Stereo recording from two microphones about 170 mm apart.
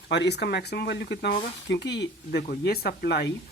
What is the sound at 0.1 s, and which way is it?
Speech, 85° left.